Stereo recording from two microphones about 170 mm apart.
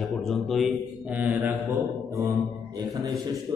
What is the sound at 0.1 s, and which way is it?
A man's voice, centre (ahead or behind).